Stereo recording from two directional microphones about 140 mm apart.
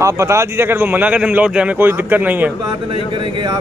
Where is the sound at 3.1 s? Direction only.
30° right (ahead or behind).